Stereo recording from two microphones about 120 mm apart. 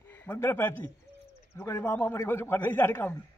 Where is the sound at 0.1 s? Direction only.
20° left (ahead or behind).